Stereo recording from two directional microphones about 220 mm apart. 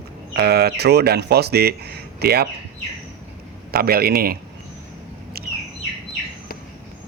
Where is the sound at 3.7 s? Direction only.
45° right (ahead or behind).